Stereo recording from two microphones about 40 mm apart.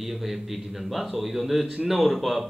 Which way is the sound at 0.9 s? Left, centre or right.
Centre.